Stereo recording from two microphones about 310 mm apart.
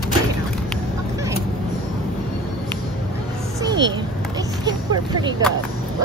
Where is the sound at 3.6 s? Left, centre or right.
Centre.